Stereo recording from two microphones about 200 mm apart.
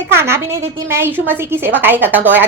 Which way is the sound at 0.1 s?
10° right (ahead or behind).